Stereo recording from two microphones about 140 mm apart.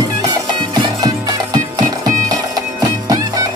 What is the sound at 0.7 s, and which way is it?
Music, 30° right (ahead or behind).